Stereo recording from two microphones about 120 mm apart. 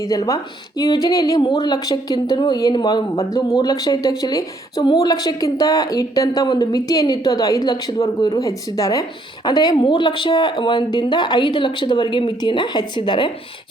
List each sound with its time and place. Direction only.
0.0 s speech: 30° left (ahead or behind)
4.8 s speech: 50° left (ahead or behind)
5.0 s speech: 35° left (ahead or behind)